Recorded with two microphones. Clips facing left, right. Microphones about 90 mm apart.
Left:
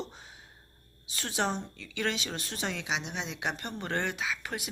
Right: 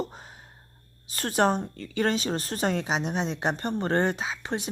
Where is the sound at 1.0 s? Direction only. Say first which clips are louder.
Right 8 dB; 45° right (ahead or behind).